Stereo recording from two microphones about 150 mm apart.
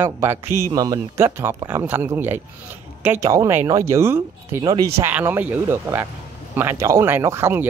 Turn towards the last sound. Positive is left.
turn(degrees=-15)  # may be behind; listen again after turning